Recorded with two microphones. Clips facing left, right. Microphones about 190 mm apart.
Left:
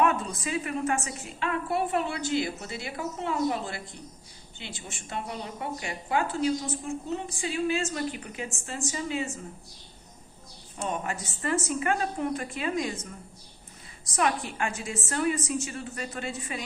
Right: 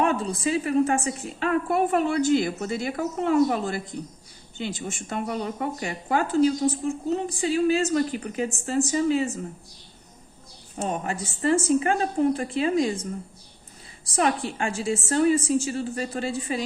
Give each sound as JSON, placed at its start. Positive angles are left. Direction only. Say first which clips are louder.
{"t": 0.0, "sound": "a woman's voice", "louder": "right 3 dB", "side_deg": -30}
{"t": 10.8, "sound": "speech", "louder": "right 3 dB", "side_deg": -30}
{"t": 14.1, "sound": "speech", "louder": "right 4 dB", "side_deg": -30}